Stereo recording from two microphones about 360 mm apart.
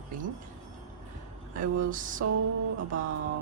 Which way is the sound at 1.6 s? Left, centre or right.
Right.